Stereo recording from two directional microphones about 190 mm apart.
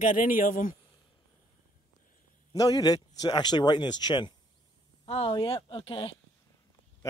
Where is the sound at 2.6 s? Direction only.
20° left (ahead or behind).